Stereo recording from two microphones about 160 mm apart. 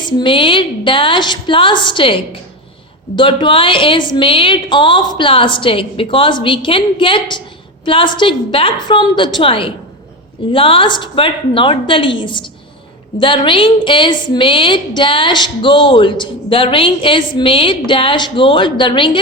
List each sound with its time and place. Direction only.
0.2 s a woman's voice: 35° left (ahead or behind)